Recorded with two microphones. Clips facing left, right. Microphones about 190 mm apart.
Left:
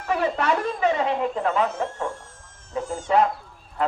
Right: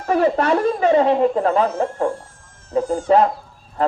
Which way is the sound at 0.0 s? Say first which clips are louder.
Right 6 dB; 40° right (ahead or behind).